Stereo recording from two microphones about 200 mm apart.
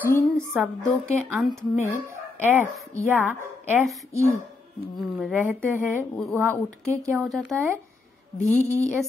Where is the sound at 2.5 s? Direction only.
10° right (ahead or behind).